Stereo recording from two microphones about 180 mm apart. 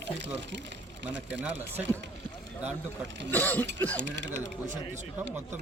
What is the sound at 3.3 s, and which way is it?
Throat clearing, 10° left (ahead or behind).